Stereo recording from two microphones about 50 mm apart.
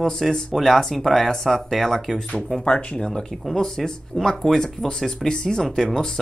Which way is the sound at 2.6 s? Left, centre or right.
Left.